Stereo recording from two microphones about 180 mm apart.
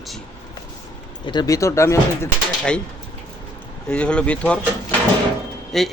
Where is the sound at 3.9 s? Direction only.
5° left (ahead or behind).